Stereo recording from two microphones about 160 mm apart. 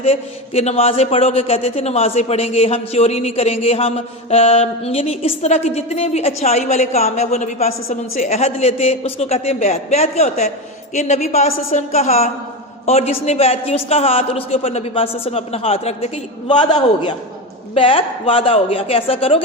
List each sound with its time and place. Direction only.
0.0 s a man's voice: 40° left (ahead or behind)